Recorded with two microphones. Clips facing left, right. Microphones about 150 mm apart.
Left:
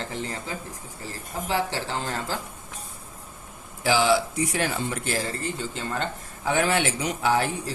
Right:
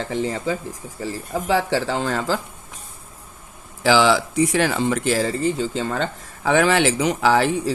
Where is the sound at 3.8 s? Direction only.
90° right.